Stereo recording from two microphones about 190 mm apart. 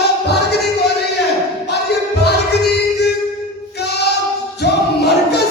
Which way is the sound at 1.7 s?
60° left (ahead or behind).